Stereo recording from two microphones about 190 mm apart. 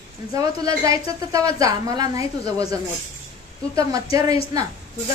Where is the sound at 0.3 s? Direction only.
20° right (ahead or behind).